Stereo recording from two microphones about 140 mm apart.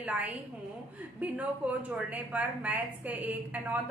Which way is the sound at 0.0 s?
10° right (ahead or behind).